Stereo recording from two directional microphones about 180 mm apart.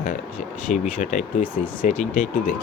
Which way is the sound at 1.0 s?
45° left (ahead or behind).